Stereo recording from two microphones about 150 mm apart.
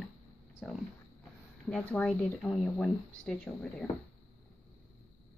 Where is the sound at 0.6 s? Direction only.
5° right (ahead or behind).